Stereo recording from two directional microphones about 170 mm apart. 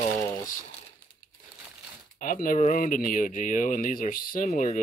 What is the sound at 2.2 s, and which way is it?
Speech, 50° left (ahead or behind).